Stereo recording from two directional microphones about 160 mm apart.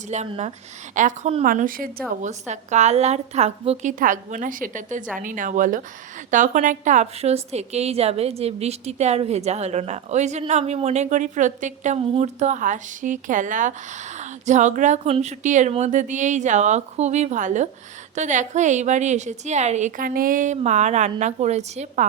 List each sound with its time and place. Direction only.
0.1 s a woman's voice: 45° right (ahead or behind)
1.5 s a woman's voice: 60° right (ahead or behind); by 3.9 s 40° right (ahead or behind)
3.9 s a woman's voice: 55° right (ahead or behind)